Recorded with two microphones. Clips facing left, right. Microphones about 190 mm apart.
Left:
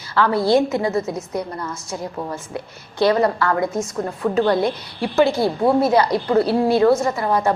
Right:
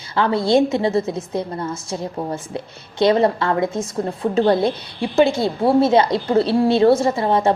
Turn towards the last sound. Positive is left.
turn(degrees=-25)  # may be behind; listen again after turning